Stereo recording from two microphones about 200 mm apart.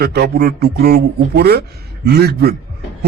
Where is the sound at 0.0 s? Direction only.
55° right (ahead or behind).